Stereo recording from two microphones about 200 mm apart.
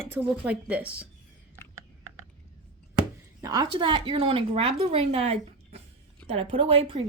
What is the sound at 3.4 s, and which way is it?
A woman's voice, 20° right (ahead or behind).